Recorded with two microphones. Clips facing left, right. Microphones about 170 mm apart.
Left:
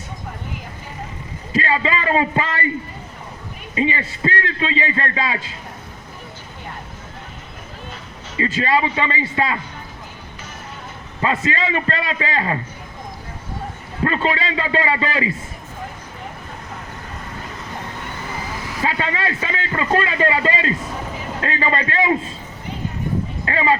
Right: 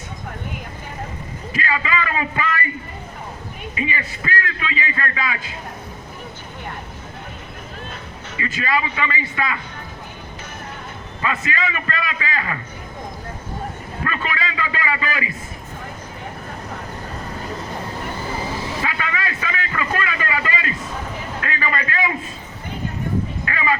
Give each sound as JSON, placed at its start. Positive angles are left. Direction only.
{"t": 1.5, "sound": "a man's voice", "side_deg": 30}
{"t": 3.8, "sound": "a man's voice", "side_deg": 30}
{"t": 8.4, "sound": "a man's voice", "side_deg": 30}
{"t": 11.2, "sound": "a man's voice", "side_deg": 30}
{"t": 14.0, "sound": "a man's voice", "side_deg": 30}
{"t": 18.3, "sound": "vehicle", "side_deg": -30}
{"t": 18.8, "sound": "a man's voice", "side_deg": 30}
{"t": 23.5, "sound": "speech", "side_deg": 30}